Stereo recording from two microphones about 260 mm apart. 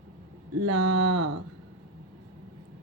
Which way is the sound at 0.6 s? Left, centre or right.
Right.